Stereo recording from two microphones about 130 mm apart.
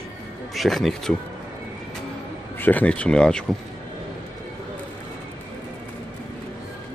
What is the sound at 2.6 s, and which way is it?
Speech, 10° left (ahead or behind).